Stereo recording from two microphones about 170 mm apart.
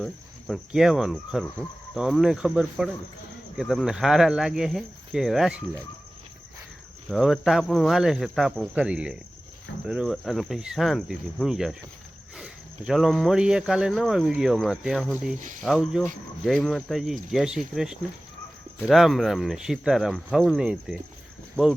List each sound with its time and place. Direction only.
0.0 s speech: centre (ahead or behind)
7.1 s speech: centre (ahead or behind)
15.4 s speech: 50° right (ahead or behind)
15.6 s speech: centre (ahead or behind)